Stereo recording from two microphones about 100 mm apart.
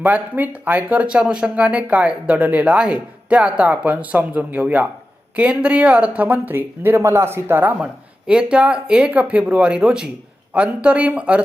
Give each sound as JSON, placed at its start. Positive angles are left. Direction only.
{"t": 0.0, "sound": "speech", "side_deg": -15}